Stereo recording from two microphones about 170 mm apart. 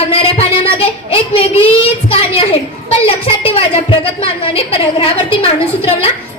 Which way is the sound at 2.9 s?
35° left (ahead or behind).